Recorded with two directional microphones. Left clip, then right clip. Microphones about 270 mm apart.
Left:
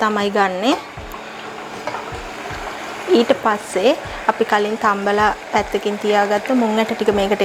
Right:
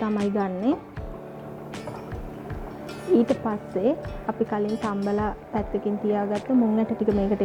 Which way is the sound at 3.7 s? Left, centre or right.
Centre.